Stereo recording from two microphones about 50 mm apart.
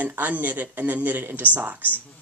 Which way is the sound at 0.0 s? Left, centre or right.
Right.